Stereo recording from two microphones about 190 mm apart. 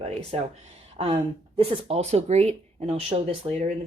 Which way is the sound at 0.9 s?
30° right (ahead or behind).